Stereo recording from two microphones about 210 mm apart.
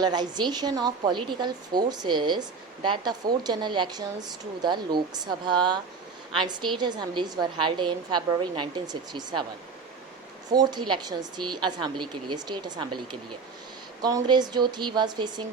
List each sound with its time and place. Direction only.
0.0 s a woman's voice: 20° right (ahead or behind)
10.5 s a woman's voice: 20° right (ahead or behind)